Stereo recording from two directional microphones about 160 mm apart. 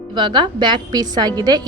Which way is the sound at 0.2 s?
30° right (ahead or behind).